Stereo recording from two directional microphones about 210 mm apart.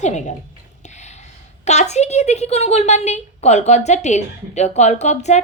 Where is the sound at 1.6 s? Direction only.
30° left (ahead or behind).